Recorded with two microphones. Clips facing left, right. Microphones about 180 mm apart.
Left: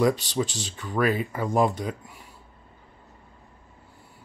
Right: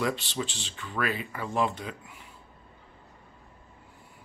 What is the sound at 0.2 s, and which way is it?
Speech, 40° left (ahead or behind).